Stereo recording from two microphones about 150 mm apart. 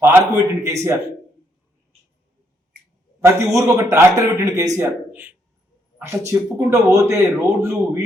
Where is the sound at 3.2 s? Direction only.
20° right (ahead or behind).